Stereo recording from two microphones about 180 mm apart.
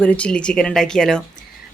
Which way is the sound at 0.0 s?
5° left (ahead or behind).